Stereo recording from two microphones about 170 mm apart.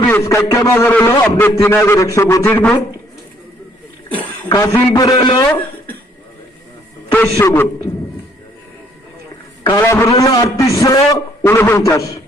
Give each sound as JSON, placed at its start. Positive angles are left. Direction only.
{"t": 0.0, "sound": "a man's voice", "side_deg": 15}
{"t": 4.4, "sound": "a man's voice", "side_deg": 20}
{"t": 7.1, "sound": "a man's voice", "side_deg": 15}
{"t": 9.6, "sound": "a man's voice", "side_deg": 20}